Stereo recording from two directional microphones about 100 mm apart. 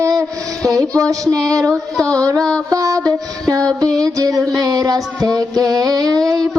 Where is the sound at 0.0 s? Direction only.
30° right (ahead or behind).